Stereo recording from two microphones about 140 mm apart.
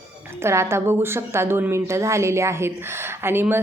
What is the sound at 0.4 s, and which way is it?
A woman's voice, 20° right (ahead or behind).